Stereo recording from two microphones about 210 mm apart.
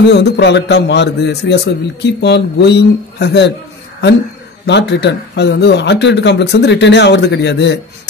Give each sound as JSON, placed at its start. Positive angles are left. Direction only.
{"t": 0.1, "sound": "a man's voice", "side_deg": 55}
{"t": 4.6, "sound": "speech", "side_deg": 55}